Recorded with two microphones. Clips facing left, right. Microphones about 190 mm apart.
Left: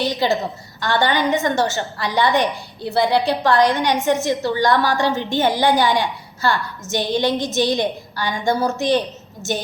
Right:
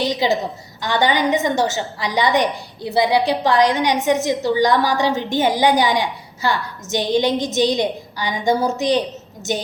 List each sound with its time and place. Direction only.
0.0 s a woman's voice: 15° right (ahead or behind)